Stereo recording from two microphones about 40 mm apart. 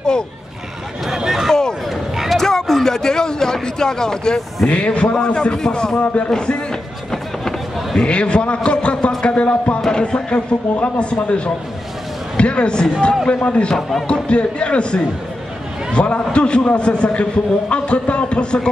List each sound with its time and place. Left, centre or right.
1.1 s a sound: centre
1.5 s a sound: centre
2.3 s speech: centre
4.6 s a man's voice: left
5.9 s speech: left
6.3 s a man's voice: left
7.1 s a sound: centre
8.0 s a man's voice: left
9.8 s a man's voice: centre
10.3 s a man's voice: left
13.7 s speech: centre
14.0 s a man's voice: left